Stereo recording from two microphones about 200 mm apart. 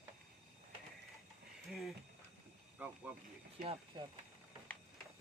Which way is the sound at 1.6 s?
Centre (ahead or behind).